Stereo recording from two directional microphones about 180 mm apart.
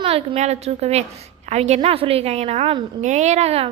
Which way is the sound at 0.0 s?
35° right (ahead or behind).